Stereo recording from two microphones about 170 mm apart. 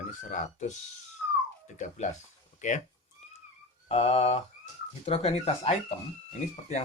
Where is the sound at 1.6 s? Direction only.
45° left (ahead or behind).